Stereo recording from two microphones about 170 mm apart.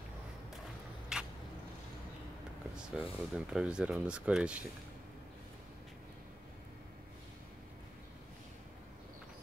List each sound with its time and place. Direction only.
1.1 s vehicle: 5° right (ahead or behind)
2.7 s speech: 5° right (ahead or behind)